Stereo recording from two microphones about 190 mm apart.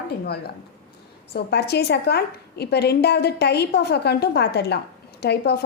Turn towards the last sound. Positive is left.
turn(degrees=60)  # may be behind; listen again after turning